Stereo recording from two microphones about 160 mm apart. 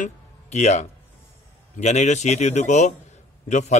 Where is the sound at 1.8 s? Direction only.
45° left (ahead or behind).